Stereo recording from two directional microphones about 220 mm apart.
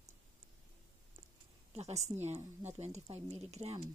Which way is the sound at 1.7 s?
30° right (ahead or behind).